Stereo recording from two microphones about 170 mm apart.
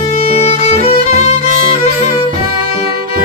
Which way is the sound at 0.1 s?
40° left (ahead or behind).